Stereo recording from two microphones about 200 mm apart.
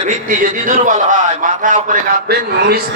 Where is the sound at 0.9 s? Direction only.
40° right (ahead or behind).